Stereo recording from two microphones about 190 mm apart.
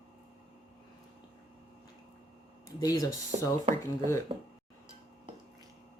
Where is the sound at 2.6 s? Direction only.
20° left (ahead or behind).